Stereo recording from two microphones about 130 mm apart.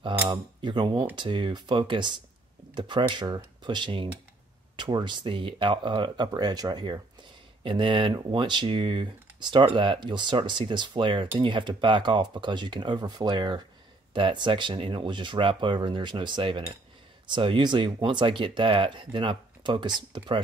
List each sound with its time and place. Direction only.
0.3 s speech: 35° right (ahead or behind)